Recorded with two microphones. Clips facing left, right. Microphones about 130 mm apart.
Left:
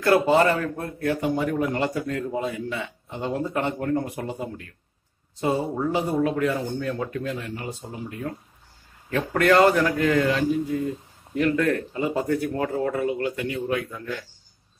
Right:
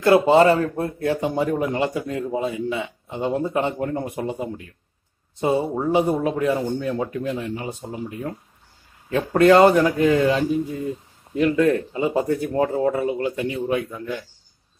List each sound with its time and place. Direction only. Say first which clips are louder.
0.0 s a man's voice: right 4 dB; 20° right (ahead or behind)